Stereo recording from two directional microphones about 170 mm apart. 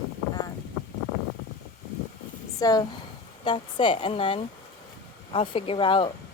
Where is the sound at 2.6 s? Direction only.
25° left (ahead or behind).